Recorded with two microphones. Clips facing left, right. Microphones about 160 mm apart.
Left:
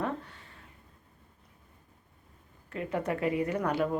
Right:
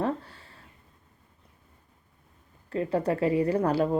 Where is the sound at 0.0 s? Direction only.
35° right (ahead or behind).